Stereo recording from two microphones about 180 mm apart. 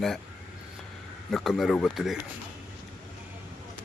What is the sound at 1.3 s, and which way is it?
Speech, centre (ahead or behind).